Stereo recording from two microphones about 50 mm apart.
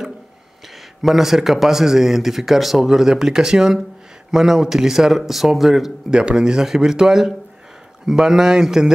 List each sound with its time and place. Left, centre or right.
1.0 s speech: centre
6.0 s speech: centre